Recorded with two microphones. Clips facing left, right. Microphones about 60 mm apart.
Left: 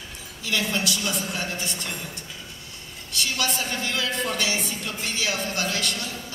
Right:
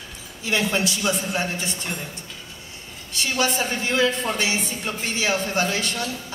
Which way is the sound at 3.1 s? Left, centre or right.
Right.